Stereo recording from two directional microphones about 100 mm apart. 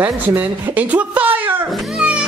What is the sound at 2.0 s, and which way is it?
Music, 5° right (ahead or behind).